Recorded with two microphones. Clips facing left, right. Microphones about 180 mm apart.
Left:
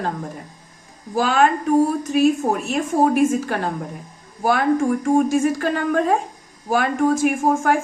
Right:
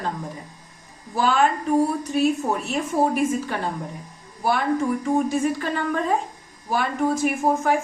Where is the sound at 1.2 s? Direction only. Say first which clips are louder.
Left 2 dB; 65° left (ahead or behind).